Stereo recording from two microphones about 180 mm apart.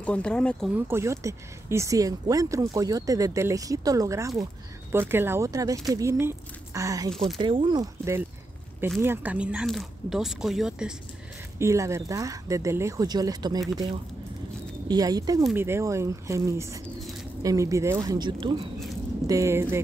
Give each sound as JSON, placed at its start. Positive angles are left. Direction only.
{"t": 0.0, "sound": "speech", "side_deg": 5}
{"t": 0.7, "sound": "speech", "side_deg": -15}
{"t": 7.3, "sound": "speech", "side_deg": -30}
{"t": 11.5, "sound": "speech", "side_deg": -15}
{"t": 14.9, "sound": "speech", "side_deg": -20}